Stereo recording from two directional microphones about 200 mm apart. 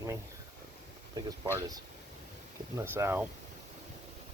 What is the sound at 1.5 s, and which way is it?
Speech, 20° right (ahead or behind).